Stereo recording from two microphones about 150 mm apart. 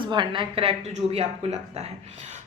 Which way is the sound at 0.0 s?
30° right (ahead or behind).